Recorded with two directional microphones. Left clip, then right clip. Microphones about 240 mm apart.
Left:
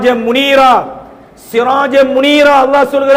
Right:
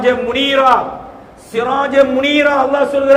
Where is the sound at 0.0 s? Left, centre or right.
Left.